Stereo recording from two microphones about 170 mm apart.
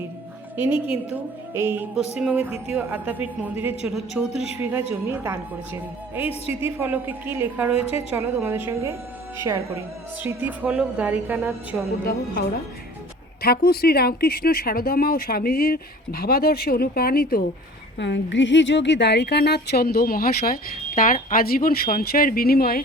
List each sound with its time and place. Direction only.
0.5 s a woman's voice: 10° right (ahead or behind)
4.6 s a woman's voice: 15° right (ahead or behind)
10.2 s a woman's voice: 10° right (ahead or behind)
13.4 s a woman's voice: 65° left (ahead or behind)
17.9 s a woman's voice: 90° left; by 22.8 s 65° left (ahead or behind)